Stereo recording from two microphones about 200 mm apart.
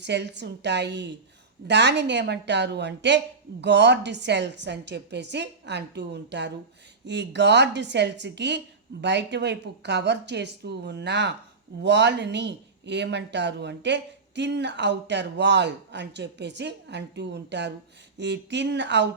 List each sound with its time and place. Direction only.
0.0 s speech: 60° right (ahead or behind)